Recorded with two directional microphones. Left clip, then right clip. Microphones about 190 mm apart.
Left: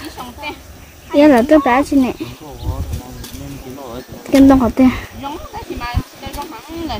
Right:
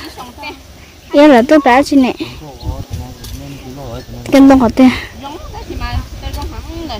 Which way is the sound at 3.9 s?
30° right (ahead or behind).